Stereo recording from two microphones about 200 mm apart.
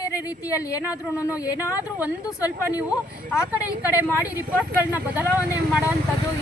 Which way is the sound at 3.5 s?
10° right (ahead or behind).